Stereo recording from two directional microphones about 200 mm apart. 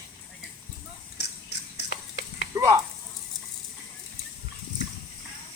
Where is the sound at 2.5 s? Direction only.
15° right (ahead or behind).